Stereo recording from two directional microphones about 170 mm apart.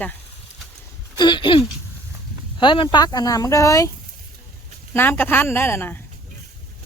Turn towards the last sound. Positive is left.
turn(degrees=15)  # may be behind; listen again after turning